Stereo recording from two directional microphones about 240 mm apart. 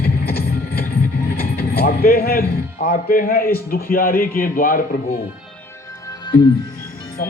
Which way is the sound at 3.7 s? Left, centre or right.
Left.